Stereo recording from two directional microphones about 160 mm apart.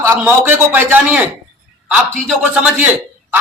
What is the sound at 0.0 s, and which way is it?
A man's voice, 15° right (ahead or behind).